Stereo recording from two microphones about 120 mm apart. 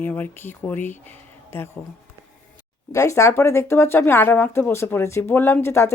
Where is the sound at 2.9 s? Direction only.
25° left (ahead or behind).